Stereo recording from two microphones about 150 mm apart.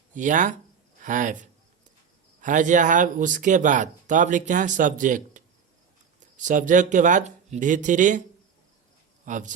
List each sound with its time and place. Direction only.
0.1 s speech: 60° right (ahead or behind)
2.4 s speech: 55° right (ahead or behind)
9.2 s speech: 60° right (ahead or behind)